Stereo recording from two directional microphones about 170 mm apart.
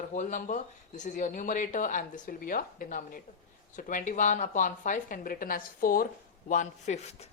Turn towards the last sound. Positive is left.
turn(degrees=45)  # may be behind; listen again after turning